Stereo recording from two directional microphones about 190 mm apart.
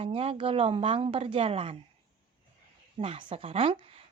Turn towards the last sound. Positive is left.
turn(degrees=-30)  # may be behind; listen again after turning